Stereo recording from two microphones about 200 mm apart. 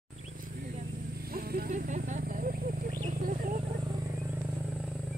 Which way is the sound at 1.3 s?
50° right (ahead or behind).